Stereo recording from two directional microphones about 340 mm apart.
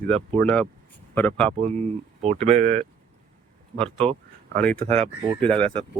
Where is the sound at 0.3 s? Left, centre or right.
Centre.